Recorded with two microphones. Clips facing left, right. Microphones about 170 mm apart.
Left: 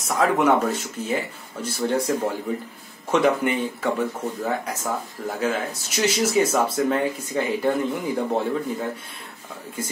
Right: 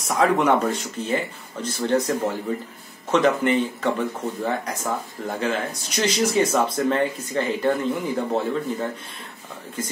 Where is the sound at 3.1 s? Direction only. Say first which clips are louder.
Right 1 dB; 10° left (ahead or behind).